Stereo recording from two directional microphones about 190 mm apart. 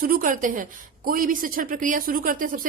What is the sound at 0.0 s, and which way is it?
A woman's voice, 45° right (ahead or behind).